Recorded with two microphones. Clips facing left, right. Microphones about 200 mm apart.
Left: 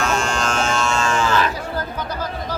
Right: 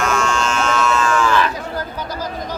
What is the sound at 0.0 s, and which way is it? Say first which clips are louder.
Electric shaver: right 2 dB; 30° left (ahead or behind).